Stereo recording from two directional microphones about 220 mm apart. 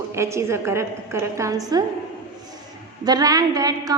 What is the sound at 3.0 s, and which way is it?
Speech, 15° right (ahead or behind).